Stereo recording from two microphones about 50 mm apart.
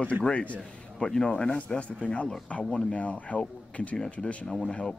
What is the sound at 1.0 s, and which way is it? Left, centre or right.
Speech, centre.